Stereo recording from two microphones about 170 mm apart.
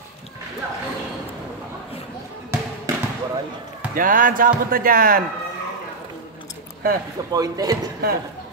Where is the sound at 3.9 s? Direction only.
55° right (ahead or behind).